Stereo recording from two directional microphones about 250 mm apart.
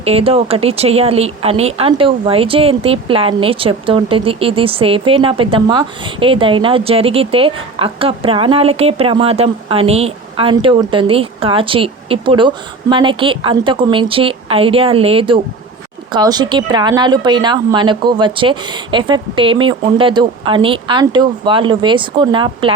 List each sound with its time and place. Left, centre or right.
0.0 s speech: right